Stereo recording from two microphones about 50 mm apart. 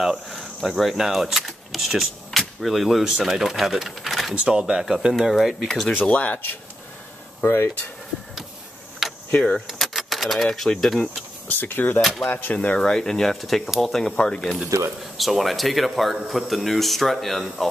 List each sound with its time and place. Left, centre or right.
0.0 s speech: centre
5.7 s speech: centre
6.0 s speech: left
6.3 s speech: left
7.4 s speech: left
9.0 s a sound: centre
9.7 s keys jangling: centre
10.7 s speech: centre
11.4 s speech: left
12.0 s speech: centre
12.3 s speech: left
12.5 s speech: centre
14.1 s speech: centre
15.1 s speech: centre